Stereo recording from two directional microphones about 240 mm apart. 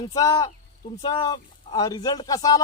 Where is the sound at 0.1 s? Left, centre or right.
Centre.